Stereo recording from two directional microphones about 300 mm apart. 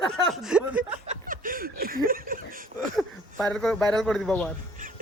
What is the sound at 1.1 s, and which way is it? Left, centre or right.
Snicker, right.